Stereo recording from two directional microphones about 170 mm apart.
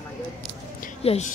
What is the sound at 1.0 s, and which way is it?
Speech, 40° left (ahead or behind).